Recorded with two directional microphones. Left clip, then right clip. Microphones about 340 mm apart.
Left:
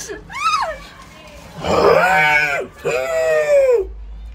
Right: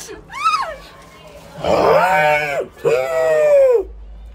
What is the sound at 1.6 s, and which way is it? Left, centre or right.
Speech, centre.